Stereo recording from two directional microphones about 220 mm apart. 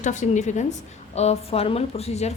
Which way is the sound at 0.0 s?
35° left (ahead or behind).